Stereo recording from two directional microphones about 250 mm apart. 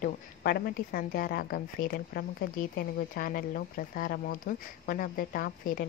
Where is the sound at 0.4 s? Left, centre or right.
Left.